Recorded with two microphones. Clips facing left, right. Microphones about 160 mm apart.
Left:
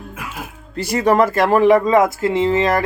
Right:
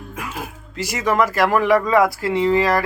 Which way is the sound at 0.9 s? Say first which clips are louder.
Left 4 dB; 30° left (ahead or behind).